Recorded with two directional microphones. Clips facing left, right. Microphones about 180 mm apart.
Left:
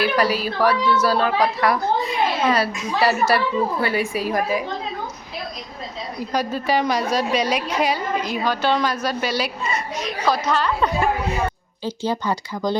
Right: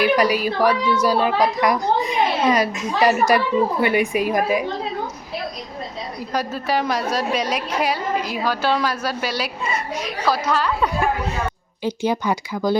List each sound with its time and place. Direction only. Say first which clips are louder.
0.0 s a child's voice: right 2 dB; 15° right (ahead or behind)
6.3 s a woman's voice: left 1 dB; centre (ahead or behind)